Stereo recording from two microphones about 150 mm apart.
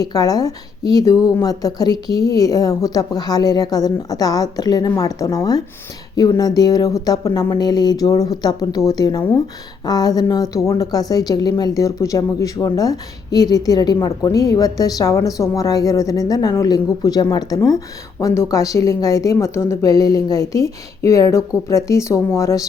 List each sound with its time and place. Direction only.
0.0 s a woman's voice: 25° left (ahead or behind)